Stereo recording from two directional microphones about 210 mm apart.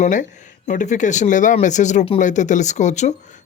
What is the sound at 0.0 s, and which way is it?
Speech, 35° left (ahead or behind).